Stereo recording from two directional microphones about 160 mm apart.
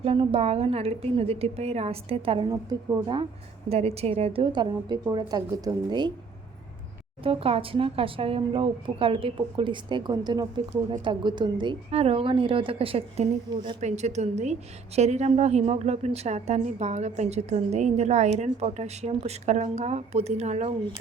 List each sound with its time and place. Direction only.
0.0 s a woman's voice: 35° right (ahead or behind)
2.5 s a woman's voice: 20° right (ahead or behind)
3.7 s a woman's voice: 40° right (ahead or behind)
7.3 s a woman's voice: 35° right (ahead or behind)
13.8 s a woman's voice: 45° right (ahead or behind)